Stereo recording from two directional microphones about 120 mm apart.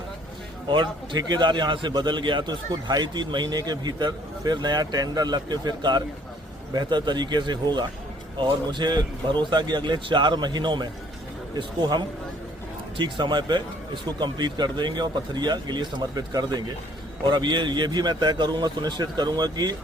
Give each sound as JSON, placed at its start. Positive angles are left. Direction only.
{"t": 0.7, "sound": "a man's voice", "side_deg": -40}